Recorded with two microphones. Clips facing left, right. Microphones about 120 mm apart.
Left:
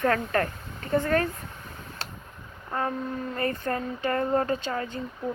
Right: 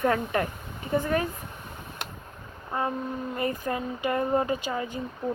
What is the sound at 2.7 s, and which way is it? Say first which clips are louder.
Speech: even; 15° right (ahead or behind).